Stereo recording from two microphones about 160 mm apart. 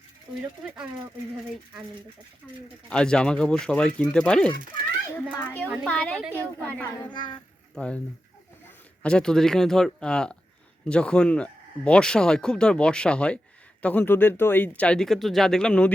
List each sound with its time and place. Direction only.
2.4 s speech: 10° left (ahead or behind)
7.1 s a child's voice: 30° left (ahead or behind)
7.8 s speech: 5° left (ahead or behind)
9.0 s speech: 5° left (ahead or behind)